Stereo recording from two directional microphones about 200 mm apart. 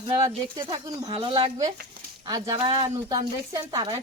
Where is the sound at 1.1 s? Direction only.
25° right (ahead or behind).